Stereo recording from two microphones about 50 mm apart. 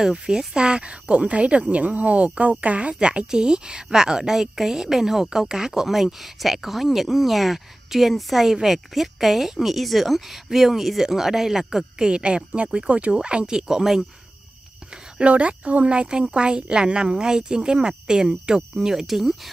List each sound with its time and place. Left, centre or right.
0.0 s a woman's voice: centre
15.1 s speech: right; by 19.5 s centre